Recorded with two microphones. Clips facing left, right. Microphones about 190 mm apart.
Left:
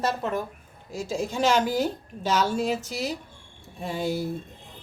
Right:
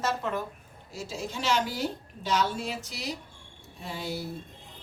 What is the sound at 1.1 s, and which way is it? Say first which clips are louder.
A woman's voice: left 6 dB; 45° left (ahead or behind).